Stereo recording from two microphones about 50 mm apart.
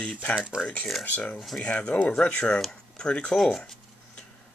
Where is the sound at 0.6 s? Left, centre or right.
Left.